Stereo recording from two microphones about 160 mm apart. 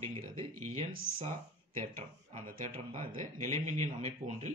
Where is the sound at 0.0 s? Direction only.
40° right (ahead or behind).